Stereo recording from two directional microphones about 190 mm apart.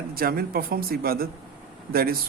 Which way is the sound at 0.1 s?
50° right (ahead or behind).